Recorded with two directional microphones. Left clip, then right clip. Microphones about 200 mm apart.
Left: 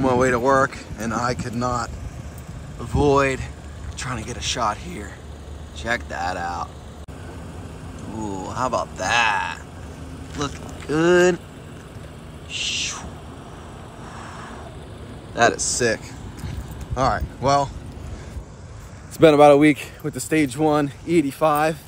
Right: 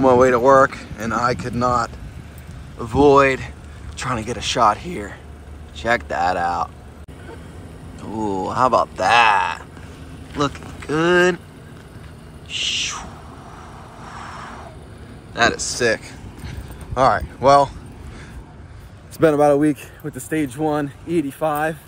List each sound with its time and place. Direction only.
0.0 s speech: 5° left (ahead or behind)
8.1 s speech: centre (ahead or behind)
12.4 s owl: 5° left (ahead or behind)
14.0 s vehicle: 5° left (ahead or behind)
15.3 s speech: 15° left (ahead or behind)
16.4 s a sound: 5° left (ahead or behind)
19.1 s speech: 15° left (ahead or behind)
19.8 s speech: 5° left (ahead or behind)